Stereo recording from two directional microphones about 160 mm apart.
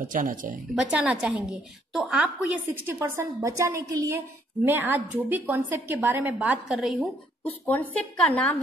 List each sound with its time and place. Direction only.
0.0 s a woman's voice: 55° right (ahead or behind)
0.7 s a woman's voice: 5° right (ahead or behind)
7.4 s speech: 10° left (ahead or behind)